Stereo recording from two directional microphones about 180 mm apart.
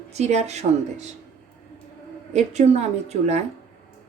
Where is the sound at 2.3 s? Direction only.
40° right (ahead or behind).